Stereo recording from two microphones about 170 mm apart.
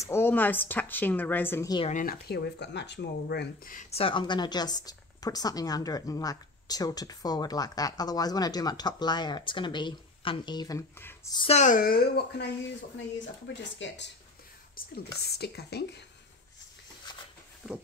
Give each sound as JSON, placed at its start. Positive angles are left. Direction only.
{"t": 0.0, "sound": "a woman's voice", "side_deg": 15}
{"t": 1.9, "sound": "speech", "side_deg": 50}
{"t": 2.2, "sound": "speech", "side_deg": 75}
{"t": 3.7, "sound": "a woman's voice", "side_deg": 35}
{"t": 11.3, "sound": "speech", "side_deg": 35}
{"t": 13.5, "sound": "speech", "side_deg": 90}
{"t": 14.8, "sound": "speech", "side_deg": 60}
{"t": 15.2, "sound": "speech", "side_deg": 75}
{"t": 17.6, "sound": "a sound", "side_deg": -5}